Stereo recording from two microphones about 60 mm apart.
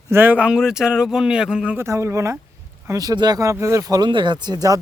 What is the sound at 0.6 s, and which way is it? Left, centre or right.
Speech, centre.